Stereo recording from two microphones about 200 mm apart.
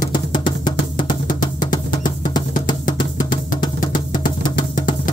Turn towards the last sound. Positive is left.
turn(degrees=20)  # may be behind; listen again after turning